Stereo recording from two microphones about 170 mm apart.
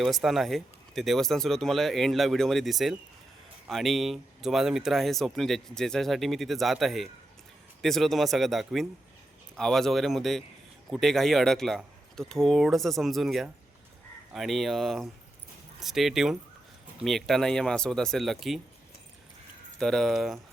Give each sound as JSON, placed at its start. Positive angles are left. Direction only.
{"t": 0.0, "sound": "speech", "side_deg": 0}
{"t": 19.8, "sound": "speech", "side_deg": 0}